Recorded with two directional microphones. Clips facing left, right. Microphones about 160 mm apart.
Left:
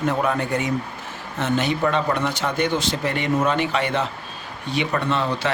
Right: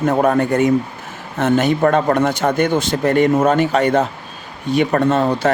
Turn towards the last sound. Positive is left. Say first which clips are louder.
# right 8 dB
turn(degrees=-45)  # may be behind; listen again after turning